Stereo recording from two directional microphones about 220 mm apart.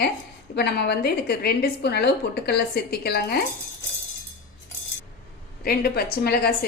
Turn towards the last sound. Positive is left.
turn(degrees=45)  # may be behind; listen again after turning